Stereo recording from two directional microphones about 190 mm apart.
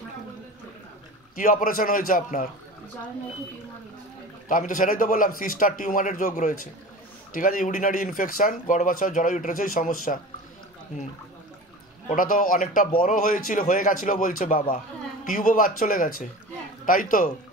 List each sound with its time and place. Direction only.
1.3 s speech: 45° left (ahead or behind)
4.5 s speech: 45° left (ahead or behind)
12.1 s speech: 45° left (ahead or behind)